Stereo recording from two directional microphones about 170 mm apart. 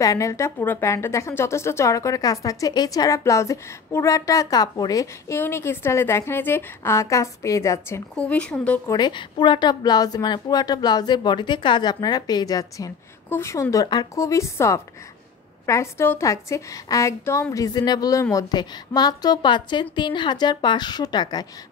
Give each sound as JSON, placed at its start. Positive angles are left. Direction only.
{"t": 0.0, "sound": "a woman's voice", "side_deg": 20}
{"t": 8.2, "sound": "a woman's voice", "side_deg": 5}
{"t": 8.9, "sound": "a woman's voice", "side_deg": 25}